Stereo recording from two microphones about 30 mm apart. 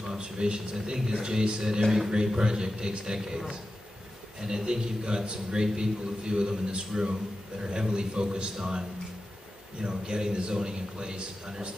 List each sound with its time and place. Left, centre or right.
0.1 s a man's voice: right
4.4 s a man's voice: centre